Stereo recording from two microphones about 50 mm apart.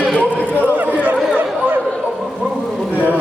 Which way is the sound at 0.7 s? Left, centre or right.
Right.